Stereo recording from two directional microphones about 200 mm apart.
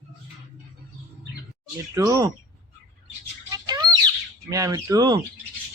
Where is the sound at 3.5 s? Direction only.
20° right (ahead or behind).